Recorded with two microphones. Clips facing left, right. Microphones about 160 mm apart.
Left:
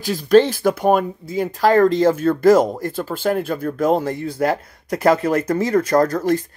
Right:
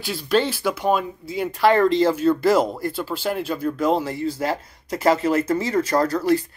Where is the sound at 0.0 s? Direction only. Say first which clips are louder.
Left 7 dB; 45° left (ahead or behind).